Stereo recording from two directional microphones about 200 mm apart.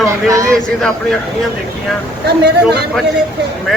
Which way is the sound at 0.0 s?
15° right (ahead or behind).